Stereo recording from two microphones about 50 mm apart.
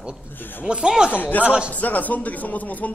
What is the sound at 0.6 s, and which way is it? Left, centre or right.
Speech, right.